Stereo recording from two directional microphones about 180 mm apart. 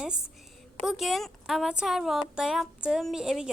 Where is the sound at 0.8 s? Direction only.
Centre (ahead or behind).